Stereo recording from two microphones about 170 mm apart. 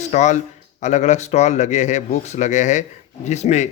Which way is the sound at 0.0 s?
45° left (ahead or behind).